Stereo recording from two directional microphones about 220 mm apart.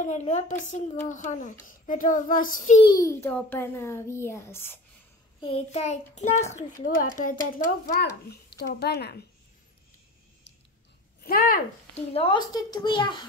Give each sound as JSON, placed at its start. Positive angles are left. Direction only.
{"t": 0.0, "sound": "a child's voice", "side_deg": 30}
{"t": 2.8, "sound": "a child's voice", "side_deg": 15}
{"t": 5.4, "sound": "a child's voice", "side_deg": 25}
{"t": 11.2, "sound": "speech", "side_deg": 40}
{"t": 12.1, "sound": "a child's voice", "side_deg": 25}